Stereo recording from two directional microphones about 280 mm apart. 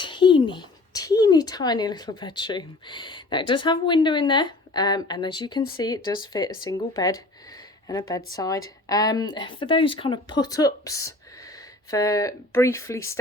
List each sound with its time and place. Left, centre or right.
0.0 s speech: centre